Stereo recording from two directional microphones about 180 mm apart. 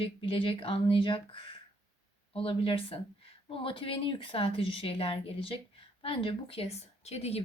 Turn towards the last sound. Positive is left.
turn(degrees=35)  # may be behind; listen again after turning